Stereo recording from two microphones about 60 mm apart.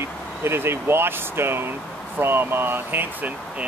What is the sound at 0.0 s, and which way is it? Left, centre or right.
Speech, right.